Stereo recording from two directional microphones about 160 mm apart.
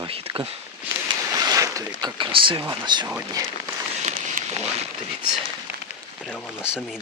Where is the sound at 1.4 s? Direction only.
25° right (ahead or behind).